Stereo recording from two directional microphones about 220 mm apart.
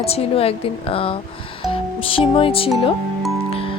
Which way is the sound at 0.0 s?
25° left (ahead or behind).